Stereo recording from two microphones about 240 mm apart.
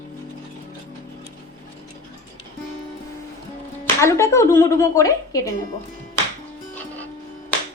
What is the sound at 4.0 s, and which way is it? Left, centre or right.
A woman's voice, centre.